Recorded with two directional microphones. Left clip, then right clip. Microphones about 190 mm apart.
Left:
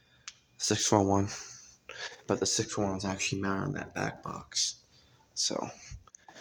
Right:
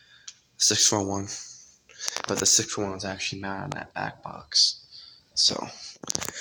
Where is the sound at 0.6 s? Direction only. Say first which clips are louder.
Right 4 dB; 15° left (ahead or behind).